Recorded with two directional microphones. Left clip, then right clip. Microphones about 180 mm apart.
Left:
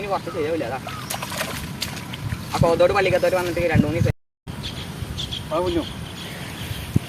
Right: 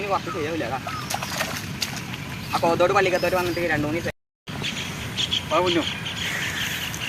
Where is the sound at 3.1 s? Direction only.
50° left (ahead or behind).